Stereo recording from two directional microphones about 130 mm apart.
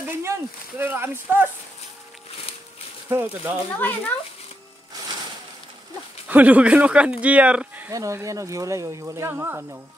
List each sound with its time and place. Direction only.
0.2 s speech: 20° right (ahead or behind)
3.1 s speech: 15° right (ahead or behind)
3.7 s speech: 15° left (ahead or behind)
6.2 s speech: 10° right (ahead or behind)
7.9 s speech: 25° right (ahead or behind)